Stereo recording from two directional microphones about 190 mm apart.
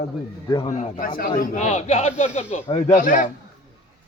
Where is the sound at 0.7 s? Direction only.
45° left (ahead or behind).